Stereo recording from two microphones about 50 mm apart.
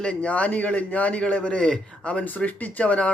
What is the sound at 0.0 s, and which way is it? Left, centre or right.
Speech, left.